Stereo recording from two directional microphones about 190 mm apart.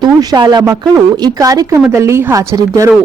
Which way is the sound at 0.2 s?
20° right (ahead or behind).